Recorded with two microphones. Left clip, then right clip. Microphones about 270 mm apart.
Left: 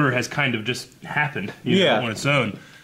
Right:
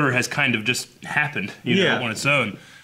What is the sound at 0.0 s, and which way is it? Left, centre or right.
Speech, left.